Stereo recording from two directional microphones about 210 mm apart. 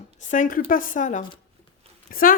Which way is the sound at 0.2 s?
35° left (ahead or behind).